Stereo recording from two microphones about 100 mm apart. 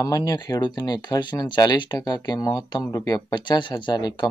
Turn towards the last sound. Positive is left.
turn(degrees=45)  # may be behind; listen again after turning